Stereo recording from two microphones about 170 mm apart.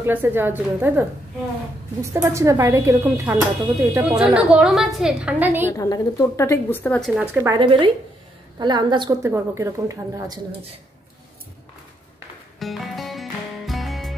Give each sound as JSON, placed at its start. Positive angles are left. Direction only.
{"t": 0.0, "sound": "speech", "side_deg": -10}
{"t": 2.1, "sound": "speech", "side_deg": -15}
{"t": 4.2, "sound": "a woman's voice", "side_deg": -5}
{"t": 5.7, "sound": "a woman's voice", "side_deg": 20}
{"t": 7.0, "sound": "speech", "side_deg": -10}
{"t": 7.5, "sound": "a woman's voice", "side_deg": -30}
{"t": 12.5, "sound": "music", "side_deg": 0}